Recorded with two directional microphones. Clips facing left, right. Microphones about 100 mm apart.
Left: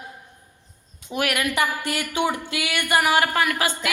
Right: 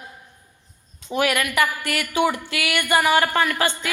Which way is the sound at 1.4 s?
20° left (ahead or behind).